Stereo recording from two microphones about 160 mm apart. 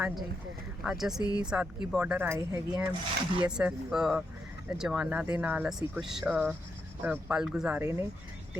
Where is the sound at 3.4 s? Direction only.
5° right (ahead or behind).